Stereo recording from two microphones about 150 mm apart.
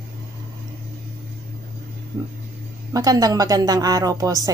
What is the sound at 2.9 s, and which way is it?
Speech, 25° right (ahead or behind).